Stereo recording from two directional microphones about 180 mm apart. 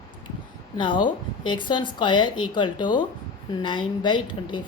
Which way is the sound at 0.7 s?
25° left (ahead or behind).